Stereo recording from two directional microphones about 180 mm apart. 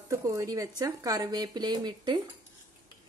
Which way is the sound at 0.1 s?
15° right (ahead or behind).